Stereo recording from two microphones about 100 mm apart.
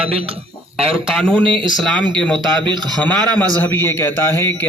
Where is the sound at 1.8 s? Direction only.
10° left (ahead or behind).